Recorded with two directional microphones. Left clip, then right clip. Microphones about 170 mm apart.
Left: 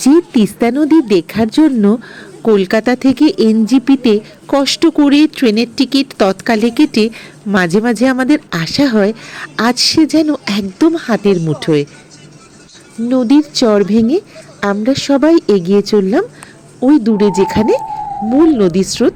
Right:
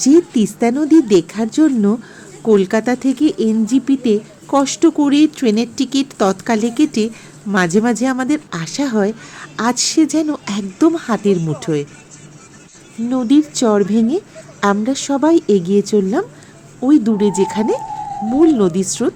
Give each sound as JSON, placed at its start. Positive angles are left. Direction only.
{"t": 0.0, "sound": "speech", "side_deg": 20}
{"t": 13.1, "sound": "speech", "side_deg": 10}